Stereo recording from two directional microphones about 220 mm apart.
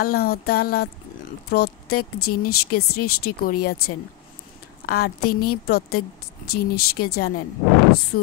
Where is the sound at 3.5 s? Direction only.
45° left (ahead or behind).